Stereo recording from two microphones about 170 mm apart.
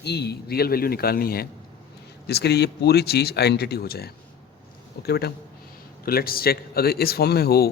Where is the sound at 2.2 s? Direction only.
75° left (ahead or behind).